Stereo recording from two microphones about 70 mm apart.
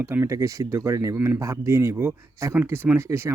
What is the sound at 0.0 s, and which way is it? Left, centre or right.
Speech, right.